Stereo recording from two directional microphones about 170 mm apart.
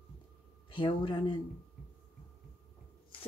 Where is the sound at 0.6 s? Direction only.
30° left (ahead or behind).